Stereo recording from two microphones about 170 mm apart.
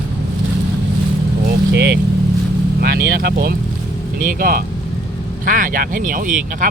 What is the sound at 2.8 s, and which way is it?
Speech, 65° right (ahead or behind).